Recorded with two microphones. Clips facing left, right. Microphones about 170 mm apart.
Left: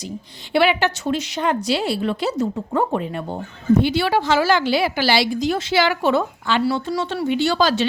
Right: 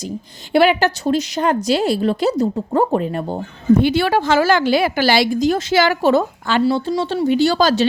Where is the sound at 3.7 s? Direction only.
50° right (ahead or behind).